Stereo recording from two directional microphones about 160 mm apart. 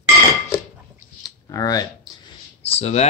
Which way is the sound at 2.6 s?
40° left (ahead or behind).